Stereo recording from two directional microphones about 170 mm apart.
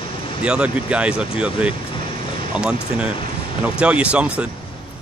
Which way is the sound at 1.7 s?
30° left (ahead or behind).